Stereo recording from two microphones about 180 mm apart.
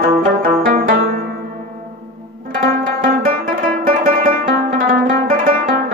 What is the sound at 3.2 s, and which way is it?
Music, 55° right (ahead or behind).